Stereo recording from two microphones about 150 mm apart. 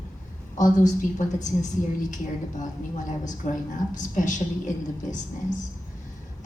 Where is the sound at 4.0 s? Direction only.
55° left (ahead or behind).